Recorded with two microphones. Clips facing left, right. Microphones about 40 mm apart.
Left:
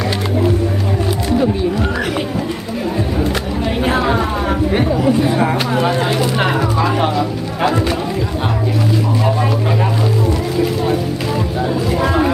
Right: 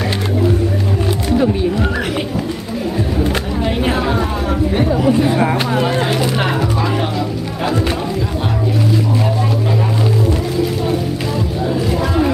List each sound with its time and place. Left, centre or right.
1.4 s music: centre
3.9 s a sound: centre
4.9 s music: centre
11.6 s music: centre